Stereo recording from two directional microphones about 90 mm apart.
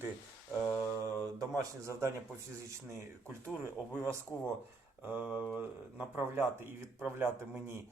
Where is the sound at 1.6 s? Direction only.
30° right (ahead or behind).